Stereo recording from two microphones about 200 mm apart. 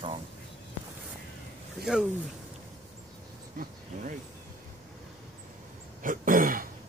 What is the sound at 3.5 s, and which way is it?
Speech, 40° right (ahead or behind).